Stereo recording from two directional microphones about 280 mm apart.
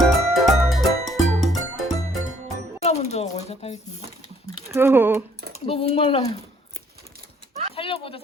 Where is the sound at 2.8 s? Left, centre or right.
Left.